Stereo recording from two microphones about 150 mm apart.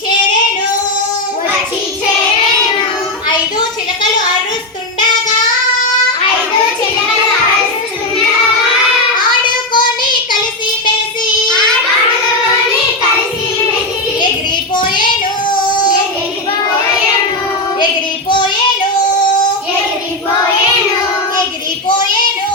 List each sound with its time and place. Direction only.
9.7 s child singing: 30° left (ahead or behind)
18.3 s child singing: 30° left (ahead or behind)